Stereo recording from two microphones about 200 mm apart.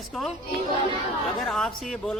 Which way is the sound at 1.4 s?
Centre (ahead or behind).